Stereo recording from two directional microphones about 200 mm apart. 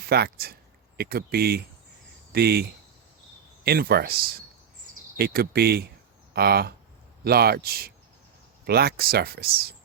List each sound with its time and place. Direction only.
0.1 s speech: 50° right (ahead or behind)
5.1 s speech: 50° right (ahead or behind)